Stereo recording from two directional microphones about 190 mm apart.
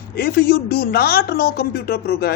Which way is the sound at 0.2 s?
55° left (ahead or behind).